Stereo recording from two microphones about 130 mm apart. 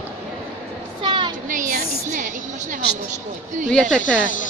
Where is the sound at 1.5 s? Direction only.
80° right.